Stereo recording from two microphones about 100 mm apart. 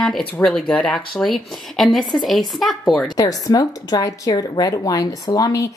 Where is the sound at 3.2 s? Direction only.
35° left (ahead or behind).